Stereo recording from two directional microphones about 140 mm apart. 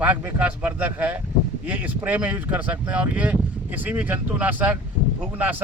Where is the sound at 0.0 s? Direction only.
10° right (ahead or behind).